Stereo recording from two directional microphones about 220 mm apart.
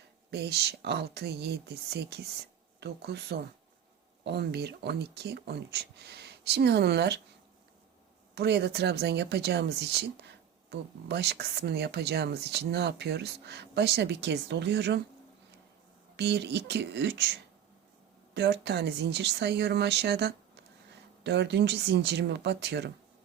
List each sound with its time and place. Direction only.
0.3 s speech: 50° right (ahead or behind)
8.4 s speech: 50° right (ahead or behind)
16.1 s speech: 50° right (ahead or behind)
18.3 s speech: 50° right (ahead or behind)